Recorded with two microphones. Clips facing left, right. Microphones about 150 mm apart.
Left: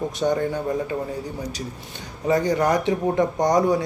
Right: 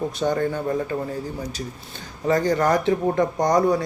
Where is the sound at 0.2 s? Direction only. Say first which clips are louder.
Left 1 dB; 15° left (ahead or behind).